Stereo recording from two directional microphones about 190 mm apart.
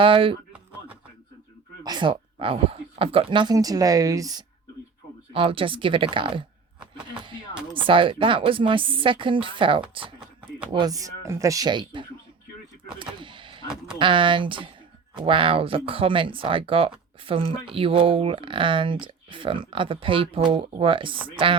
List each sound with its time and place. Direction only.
0.0 s speech: 30° right (ahead or behind)
1.8 s speech: 25° right (ahead or behind)
13.0 s vehicle: 25° right (ahead or behind)
14.0 s speech: 25° right (ahead or behind)